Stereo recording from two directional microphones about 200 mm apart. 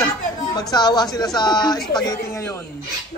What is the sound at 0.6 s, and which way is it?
A man's voice, 20° left (ahead or behind).